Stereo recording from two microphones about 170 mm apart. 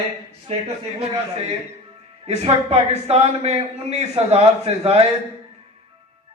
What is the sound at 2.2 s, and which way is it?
A man's voice, 35° right (ahead or behind).